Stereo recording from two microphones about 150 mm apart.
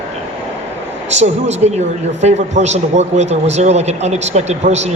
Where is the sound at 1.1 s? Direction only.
45° right (ahead or behind).